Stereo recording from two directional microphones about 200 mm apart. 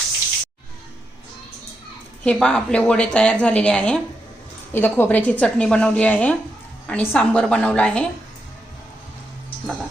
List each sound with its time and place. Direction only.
2.2 s a woman's voice: 5° left (ahead or behind)